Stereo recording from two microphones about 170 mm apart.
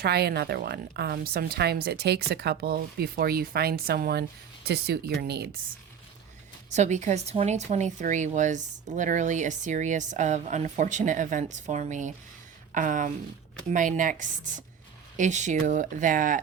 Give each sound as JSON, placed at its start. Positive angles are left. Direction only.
{"t": 0.0, "sound": "a woman's voice", "side_deg": -70}
{"t": 6.7, "sound": "speech", "side_deg": -45}